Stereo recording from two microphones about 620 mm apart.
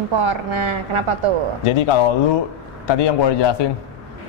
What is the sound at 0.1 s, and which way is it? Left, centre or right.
Speech, right.